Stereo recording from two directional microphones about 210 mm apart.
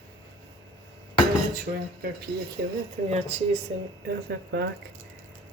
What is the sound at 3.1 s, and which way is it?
Speech, 30° right (ahead or behind).